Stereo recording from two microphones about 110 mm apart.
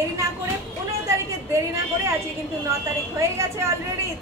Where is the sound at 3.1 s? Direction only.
30° right (ahead or behind).